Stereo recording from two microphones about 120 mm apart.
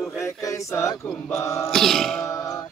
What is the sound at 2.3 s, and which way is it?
Chant, 30° left (ahead or behind).